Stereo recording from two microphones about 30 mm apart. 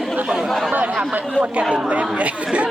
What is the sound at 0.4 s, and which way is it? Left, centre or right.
Chatter, centre.